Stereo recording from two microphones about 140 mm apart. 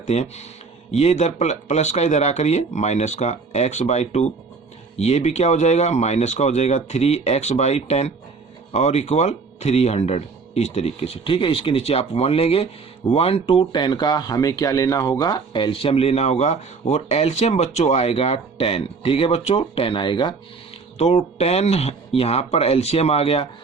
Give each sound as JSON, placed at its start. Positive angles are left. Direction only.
{"t": 0.1, "sound": "speech", "side_deg": 50}
{"t": 21.0, "sound": "speech", "side_deg": 50}